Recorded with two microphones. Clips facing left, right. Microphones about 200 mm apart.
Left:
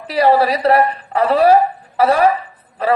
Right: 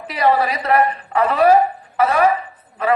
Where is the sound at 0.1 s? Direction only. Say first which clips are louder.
Left 4 dB; 35° left (ahead or behind).